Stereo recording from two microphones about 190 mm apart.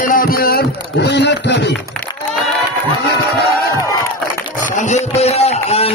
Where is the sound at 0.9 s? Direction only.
65° left (ahead or behind).